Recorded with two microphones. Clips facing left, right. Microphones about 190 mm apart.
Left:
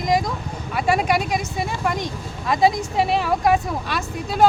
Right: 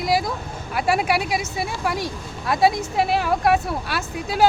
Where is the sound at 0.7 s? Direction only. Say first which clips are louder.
Left 1 dB; 5° right (ahead or behind).